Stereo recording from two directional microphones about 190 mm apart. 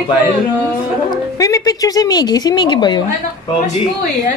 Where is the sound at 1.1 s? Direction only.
15° left (ahead or behind).